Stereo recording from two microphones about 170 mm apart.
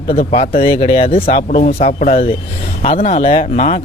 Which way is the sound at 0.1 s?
35° left (ahead or behind).